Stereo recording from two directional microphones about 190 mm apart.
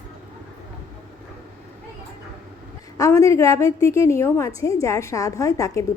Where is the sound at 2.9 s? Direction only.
15° left (ahead or behind).